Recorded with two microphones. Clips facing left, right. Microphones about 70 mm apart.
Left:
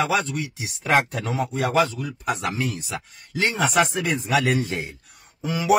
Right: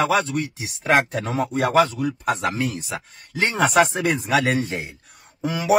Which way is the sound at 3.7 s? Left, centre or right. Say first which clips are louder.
Right 3 dB; right.